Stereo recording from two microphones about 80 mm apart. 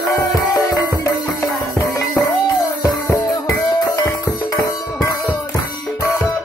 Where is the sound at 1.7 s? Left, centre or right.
Left.